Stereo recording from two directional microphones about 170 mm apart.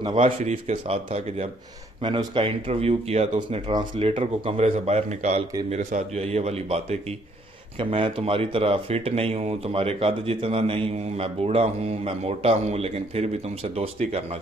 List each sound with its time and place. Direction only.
0.1 s speech: 40° right (ahead or behind)
2.0 s speech: 30° right (ahead or behind)